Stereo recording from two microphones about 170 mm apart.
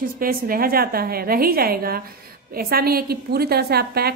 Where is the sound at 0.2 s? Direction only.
60° right (ahead or behind).